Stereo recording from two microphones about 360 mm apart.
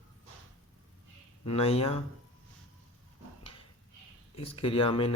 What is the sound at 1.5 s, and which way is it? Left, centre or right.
Speech, centre.